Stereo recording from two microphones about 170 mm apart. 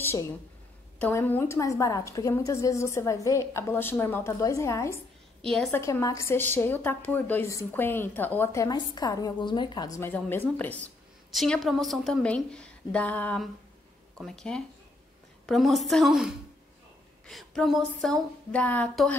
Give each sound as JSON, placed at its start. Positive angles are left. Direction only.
{"t": 0.0, "sound": "a sound", "side_deg": 15}
{"t": 0.9, "sound": "speech", "side_deg": 10}
{"t": 5.4, "sound": "a woman's voice", "side_deg": 5}
{"t": 5.7, "sound": "a woman's voice", "side_deg": 15}
{"t": 17.3, "sound": "a woman's voice", "side_deg": 0}